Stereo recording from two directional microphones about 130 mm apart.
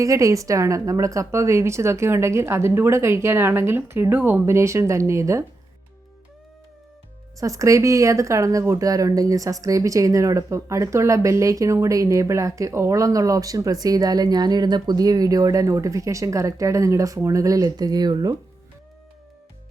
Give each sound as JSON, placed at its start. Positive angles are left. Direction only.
{"t": 0.0, "sound": "speech", "side_deg": -25}
{"t": 7.3, "sound": "speech", "side_deg": -25}